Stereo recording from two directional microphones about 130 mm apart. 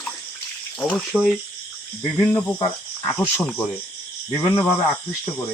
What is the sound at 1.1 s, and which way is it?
Frog, 5° left (ahead or behind).